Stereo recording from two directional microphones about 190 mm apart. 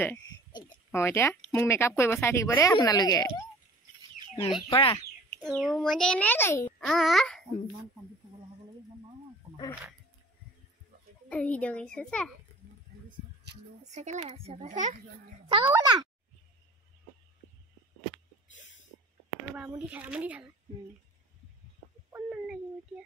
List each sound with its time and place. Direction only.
0.5 s speech: 20° left (ahead or behind)
4.6 s speech: 25° left (ahead or behind)
5.4 s a child's voice: centre (ahead or behind)
11.2 s a child's voice: 5° left (ahead or behind)
13.8 s speech: 40° right (ahead or behind)
15.4 s a child's voice: 25° right (ahead or behind)
18.5 s snort: 75° left (ahead or behind)
19.7 s a woman's voice: 10° right (ahead or behind)
22.1 s speech: 10° right (ahead or behind)